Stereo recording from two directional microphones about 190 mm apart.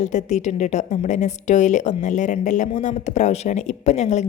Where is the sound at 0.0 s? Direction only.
40° left (ahead or behind).